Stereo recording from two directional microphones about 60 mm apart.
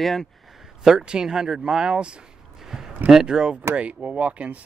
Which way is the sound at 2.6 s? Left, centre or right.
Centre.